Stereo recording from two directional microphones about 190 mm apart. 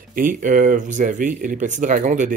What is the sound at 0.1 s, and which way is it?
Speech, 45° right (ahead or behind).